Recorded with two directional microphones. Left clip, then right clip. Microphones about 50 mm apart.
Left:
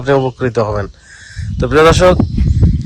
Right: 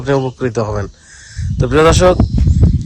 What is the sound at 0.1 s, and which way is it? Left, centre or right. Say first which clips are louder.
Speech: left 3 dB; right.